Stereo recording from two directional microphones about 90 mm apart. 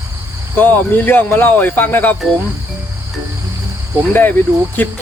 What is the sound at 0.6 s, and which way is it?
Speech, 20° left (ahead or behind).